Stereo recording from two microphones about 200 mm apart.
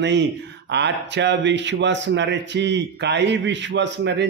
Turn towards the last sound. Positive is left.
turn(degrees=-60)  # may be behind; listen again after turning